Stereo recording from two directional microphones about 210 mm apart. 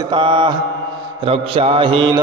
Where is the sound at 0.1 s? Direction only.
25° right (ahead or behind).